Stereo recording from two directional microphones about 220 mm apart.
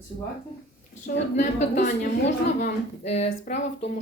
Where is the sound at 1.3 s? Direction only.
30° left (ahead or behind).